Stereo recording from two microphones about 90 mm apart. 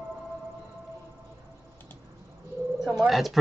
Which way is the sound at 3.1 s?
Centre (ahead or behind).